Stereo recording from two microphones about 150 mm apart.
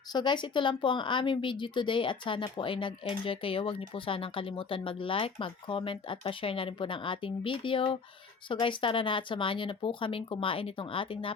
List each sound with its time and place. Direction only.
0.1 s speech: 30° left (ahead or behind)